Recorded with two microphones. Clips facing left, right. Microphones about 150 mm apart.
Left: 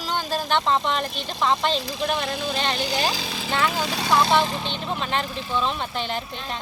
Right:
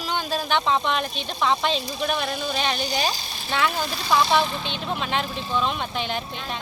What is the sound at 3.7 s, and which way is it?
Speech, 85° left.